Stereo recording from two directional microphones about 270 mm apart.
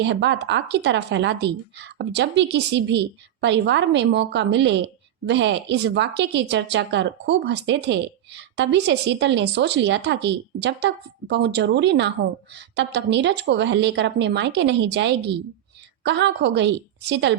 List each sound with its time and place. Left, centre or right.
0.0 s speech: right